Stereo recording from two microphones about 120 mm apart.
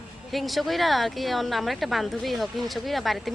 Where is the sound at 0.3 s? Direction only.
Centre (ahead or behind).